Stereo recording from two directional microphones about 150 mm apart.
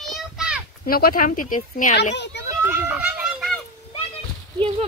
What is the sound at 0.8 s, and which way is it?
Speech, 80° left.